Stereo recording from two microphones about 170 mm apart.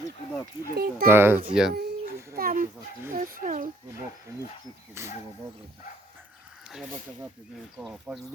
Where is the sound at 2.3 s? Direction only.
55° right (ahead or behind).